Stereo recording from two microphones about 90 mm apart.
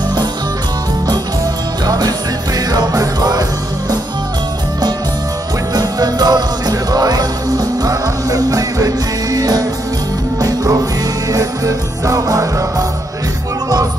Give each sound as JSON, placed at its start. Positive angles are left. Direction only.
{"t": 1.9, "sound": "music", "side_deg": -45}
{"t": 5.8, "sound": "music", "side_deg": -45}